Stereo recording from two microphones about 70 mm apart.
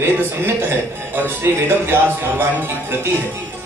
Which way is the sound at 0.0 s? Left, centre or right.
Right.